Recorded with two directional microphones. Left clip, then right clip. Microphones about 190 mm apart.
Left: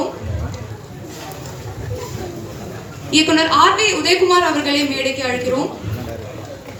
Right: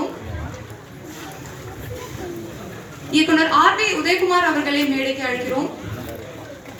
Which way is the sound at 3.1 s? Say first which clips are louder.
Left 2 dB; 50° left (ahead or behind).